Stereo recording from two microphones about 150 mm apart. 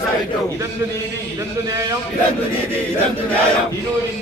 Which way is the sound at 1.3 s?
20° right (ahead or behind).